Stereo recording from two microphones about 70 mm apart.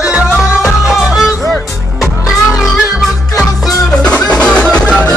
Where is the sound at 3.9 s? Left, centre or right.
Centre.